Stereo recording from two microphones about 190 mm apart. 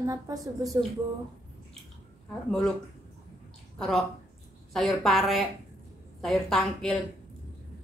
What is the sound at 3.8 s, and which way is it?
Speech, centre (ahead or behind).